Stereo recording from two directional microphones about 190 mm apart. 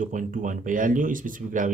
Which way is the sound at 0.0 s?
45° right (ahead or behind).